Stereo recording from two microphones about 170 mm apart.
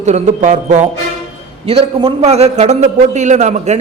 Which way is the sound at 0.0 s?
45° right (ahead or behind).